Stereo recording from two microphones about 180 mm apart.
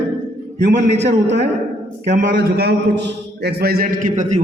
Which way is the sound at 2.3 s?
65° right (ahead or behind).